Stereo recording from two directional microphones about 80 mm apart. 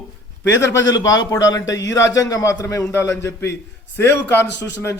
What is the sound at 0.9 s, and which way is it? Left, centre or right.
A man's voice, left.